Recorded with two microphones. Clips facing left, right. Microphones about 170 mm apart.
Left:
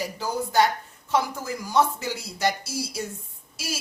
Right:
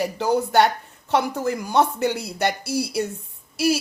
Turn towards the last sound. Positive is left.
turn(degrees=-65)  # may be behind; listen again after turning